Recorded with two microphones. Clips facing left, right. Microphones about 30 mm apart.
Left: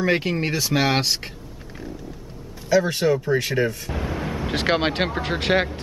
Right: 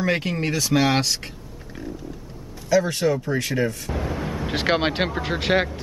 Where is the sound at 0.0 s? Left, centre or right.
Centre.